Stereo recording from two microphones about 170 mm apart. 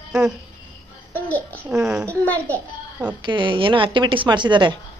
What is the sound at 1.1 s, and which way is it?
Speech, 10° left (ahead or behind).